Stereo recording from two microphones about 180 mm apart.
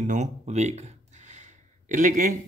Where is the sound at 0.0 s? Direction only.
40° right (ahead or behind).